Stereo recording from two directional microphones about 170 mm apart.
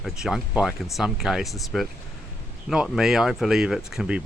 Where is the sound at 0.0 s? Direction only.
Centre (ahead or behind).